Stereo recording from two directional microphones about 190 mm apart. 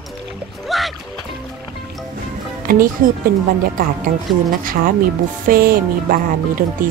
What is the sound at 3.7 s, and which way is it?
Speech, 45° right (ahead or behind).